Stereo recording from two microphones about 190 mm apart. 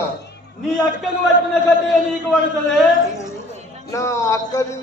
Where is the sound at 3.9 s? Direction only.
15° left (ahead or behind).